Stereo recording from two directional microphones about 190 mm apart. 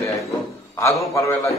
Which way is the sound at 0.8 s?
15° left (ahead or behind).